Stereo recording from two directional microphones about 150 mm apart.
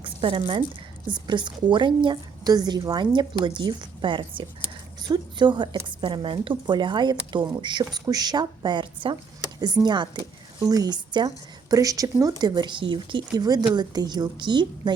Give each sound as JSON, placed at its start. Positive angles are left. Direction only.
{"t": 0.0, "sound": "a woman's voice", "side_deg": -35}